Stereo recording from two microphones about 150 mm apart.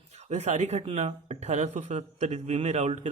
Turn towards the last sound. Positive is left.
turn(degrees=-50)  # may be behind; listen again after turning